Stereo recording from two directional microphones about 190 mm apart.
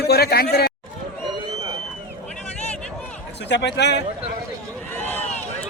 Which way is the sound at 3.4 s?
65° left (ahead or behind).